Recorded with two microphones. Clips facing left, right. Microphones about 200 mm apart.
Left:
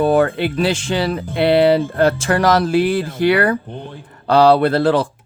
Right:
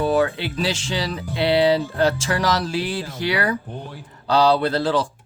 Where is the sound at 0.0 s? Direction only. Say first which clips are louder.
Left 5 dB; 55° left (ahead or behind).